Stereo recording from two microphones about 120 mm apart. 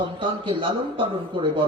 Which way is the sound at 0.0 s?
45° right (ahead or behind).